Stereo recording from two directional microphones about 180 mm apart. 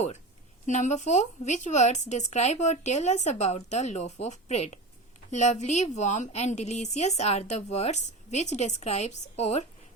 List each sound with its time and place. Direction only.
0.6 s a woman's voice: 40° left (ahead or behind)